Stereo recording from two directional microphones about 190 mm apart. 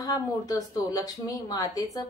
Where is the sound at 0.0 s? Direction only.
20° left (ahead or behind).